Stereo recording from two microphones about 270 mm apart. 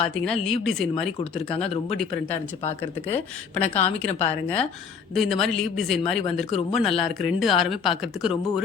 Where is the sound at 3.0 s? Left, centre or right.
Centre.